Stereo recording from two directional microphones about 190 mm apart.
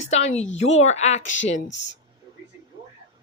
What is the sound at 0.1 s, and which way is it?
Speech, 35° left (ahead or behind).